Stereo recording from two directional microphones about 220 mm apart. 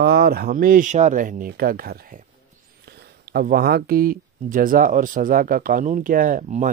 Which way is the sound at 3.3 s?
40° right (ahead or behind).